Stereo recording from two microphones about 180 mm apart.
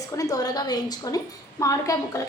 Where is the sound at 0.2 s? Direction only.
20° left (ahead or behind).